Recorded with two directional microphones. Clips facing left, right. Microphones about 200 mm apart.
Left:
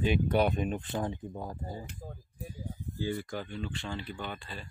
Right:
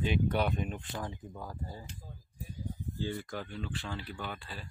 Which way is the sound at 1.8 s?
55° left (ahead or behind).